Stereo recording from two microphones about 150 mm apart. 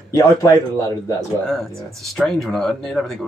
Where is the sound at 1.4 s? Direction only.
Centre (ahead or behind).